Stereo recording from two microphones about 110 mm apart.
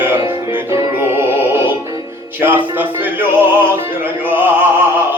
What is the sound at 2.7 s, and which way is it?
Music, 20° right (ahead or behind).